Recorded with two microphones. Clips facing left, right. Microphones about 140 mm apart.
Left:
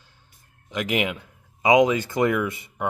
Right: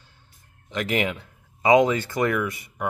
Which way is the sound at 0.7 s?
10° left (ahead or behind).